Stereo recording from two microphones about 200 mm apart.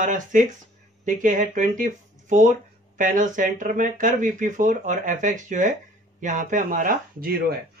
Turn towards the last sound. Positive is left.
turn(degrees=-45)  # may be behind; listen again after turning